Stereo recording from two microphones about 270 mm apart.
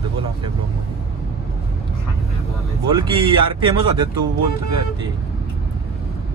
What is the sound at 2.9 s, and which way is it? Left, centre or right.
Speech, centre.